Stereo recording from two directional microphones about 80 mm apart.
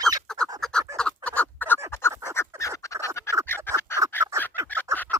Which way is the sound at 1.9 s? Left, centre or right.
Left.